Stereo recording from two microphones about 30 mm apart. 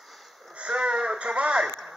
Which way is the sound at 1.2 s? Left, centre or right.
Right.